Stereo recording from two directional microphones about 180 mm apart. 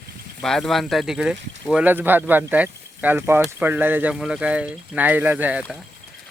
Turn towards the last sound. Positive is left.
turn(degrees=-5)  # may be behind; listen again after turning